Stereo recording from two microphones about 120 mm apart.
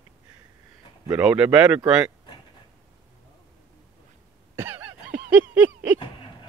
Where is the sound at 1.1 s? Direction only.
10° right (ahead or behind).